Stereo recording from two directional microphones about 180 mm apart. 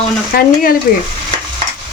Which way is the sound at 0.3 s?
55° left (ahead or behind).